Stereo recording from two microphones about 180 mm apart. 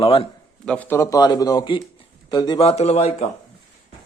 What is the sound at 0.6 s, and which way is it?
Speech, 10° left (ahead or behind).